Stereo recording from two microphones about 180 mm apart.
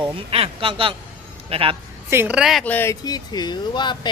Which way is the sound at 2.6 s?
10° left (ahead or behind).